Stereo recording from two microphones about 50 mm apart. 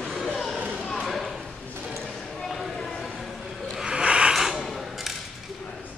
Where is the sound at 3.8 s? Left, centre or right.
Centre.